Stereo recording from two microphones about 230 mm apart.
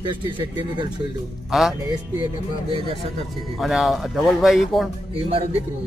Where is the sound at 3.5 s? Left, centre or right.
Centre.